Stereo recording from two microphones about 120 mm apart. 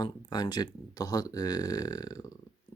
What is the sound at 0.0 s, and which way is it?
Speech, 35° left (ahead or behind).